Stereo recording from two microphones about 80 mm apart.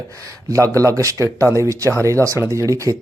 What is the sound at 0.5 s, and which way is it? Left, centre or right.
Speech, right.